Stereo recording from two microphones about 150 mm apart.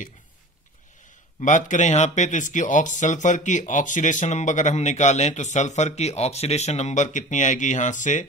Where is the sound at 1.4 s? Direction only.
55° left (ahead or behind).